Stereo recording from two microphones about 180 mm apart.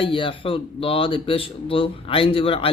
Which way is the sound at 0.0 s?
30° left (ahead or behind).